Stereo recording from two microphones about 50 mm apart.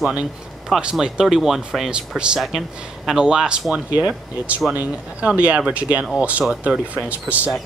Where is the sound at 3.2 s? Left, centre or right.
Centre.